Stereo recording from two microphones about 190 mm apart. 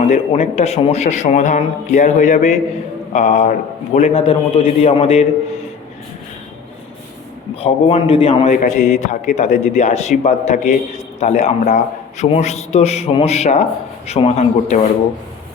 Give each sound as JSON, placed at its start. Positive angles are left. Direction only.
{"t": 0.1, "sound": "a man's voice", "side_deg": 35}
{"t": 7.5, "sound": "a man's voice", "side_deg": 30}